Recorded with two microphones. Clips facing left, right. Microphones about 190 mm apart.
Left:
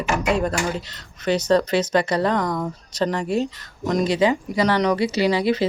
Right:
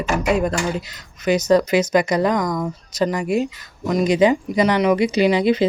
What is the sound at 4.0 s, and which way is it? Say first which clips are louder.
Speech: right 5 dB; 15° right (ahead or behind).